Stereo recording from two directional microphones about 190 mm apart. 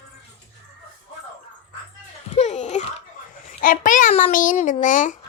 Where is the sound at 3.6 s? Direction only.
45° left (ahead or behind).